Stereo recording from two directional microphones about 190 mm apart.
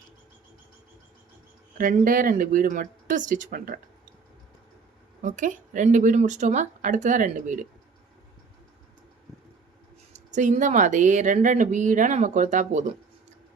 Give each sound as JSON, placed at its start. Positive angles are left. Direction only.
{"t": 1.8, "sound": "speech", "side_deg": -45}
{"t": 5.2, "sound": "speech", "side_deg": -40}
{"t": 10.3, "sound": "speech", "side_deg": -40}